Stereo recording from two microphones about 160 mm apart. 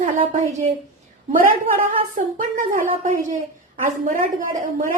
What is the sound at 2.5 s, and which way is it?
A woman's voice, 55° right (ahead or behind).